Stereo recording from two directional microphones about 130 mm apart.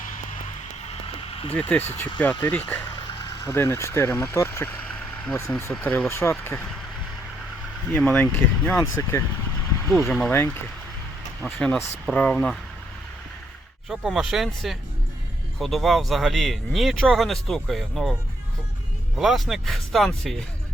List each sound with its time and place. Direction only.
1.0 s a sound: 45° left (ahead or behind)
1.5 s speech: 15° left (ahead or behind)
7.9 s speech: 15° left (ahead or behind)
9.9 s speech: centre (ahead or behind)
11.4 s speech: 15° left (ahead or behind)
13.8 s speech: 5° right (ahead or behind)
19.2 s speech: centre (ahead or behind)